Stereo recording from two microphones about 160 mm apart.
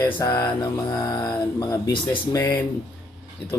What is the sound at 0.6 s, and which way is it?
Speech, 25° left (ahead or behind).